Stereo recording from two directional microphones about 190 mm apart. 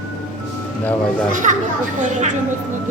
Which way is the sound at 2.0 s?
40° right (ahead or behind).